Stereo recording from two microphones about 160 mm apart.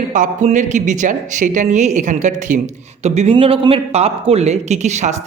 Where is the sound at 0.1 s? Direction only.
50° right (ahead or behind).